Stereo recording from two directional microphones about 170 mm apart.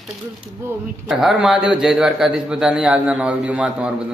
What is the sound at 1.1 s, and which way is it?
A man's voice, centre (ahead or behind).